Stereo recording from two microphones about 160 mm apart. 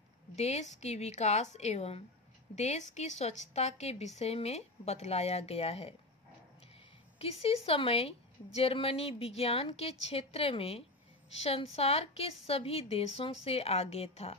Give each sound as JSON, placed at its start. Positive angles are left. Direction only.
{"t": 0.4, "sound": "a woman's voice", "side_deg": 45}
{"t": 7.2, "sound": "a woman's voice", "side_deg": 40}